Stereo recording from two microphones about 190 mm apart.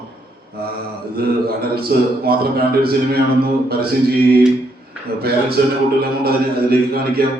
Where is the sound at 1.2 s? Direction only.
55° right (ahead or behind).